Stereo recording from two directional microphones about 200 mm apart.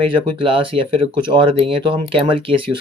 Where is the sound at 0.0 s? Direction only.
25° right (ahead or behind).